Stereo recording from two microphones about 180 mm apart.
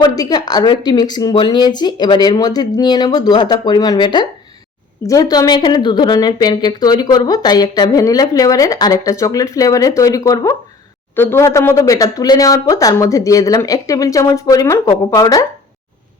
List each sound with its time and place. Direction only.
0.0 s a woman's voice: 20° left (ahead or behind)